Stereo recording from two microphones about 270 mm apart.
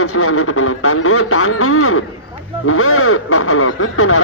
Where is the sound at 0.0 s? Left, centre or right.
Left.